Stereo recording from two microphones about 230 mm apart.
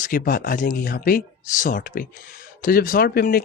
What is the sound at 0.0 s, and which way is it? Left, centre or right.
Speech, left.